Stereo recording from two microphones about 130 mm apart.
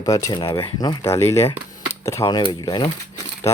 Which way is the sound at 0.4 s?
45° left (ahead or behind).